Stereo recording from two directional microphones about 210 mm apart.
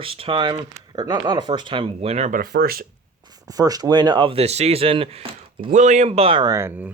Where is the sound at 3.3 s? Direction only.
20° right (ahead or behind).